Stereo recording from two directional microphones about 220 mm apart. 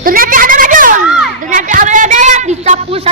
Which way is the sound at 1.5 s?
35° right (ahead or behind).